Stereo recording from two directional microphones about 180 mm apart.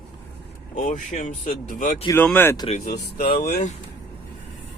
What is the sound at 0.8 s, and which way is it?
Speech, 45° left (ahead or behind).